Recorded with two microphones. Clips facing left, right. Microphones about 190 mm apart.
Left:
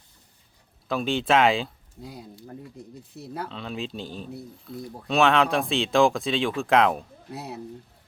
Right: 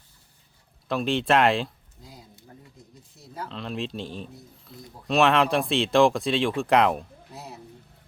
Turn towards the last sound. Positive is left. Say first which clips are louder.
# left 5 dB
turn(degrees=65)  # may be behind; listen again after turning